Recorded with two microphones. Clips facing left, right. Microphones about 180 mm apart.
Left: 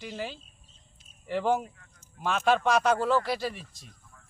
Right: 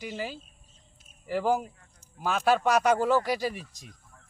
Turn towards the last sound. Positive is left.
turn(degrees=-10)  # may be behind; listen again after turning